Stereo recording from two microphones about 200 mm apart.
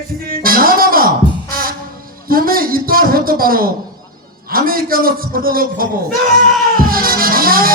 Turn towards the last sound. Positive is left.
turn(degrees=-45)  # may be behind; listen again after turning